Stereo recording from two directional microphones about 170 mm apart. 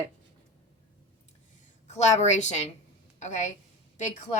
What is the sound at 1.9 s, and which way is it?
A woman's voice, 40° left (ahead or behind).